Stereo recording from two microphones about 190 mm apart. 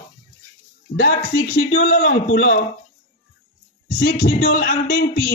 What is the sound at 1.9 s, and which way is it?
Speech, 60° left (ahead or behind).